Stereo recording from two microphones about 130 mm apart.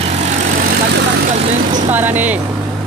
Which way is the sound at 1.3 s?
90° right.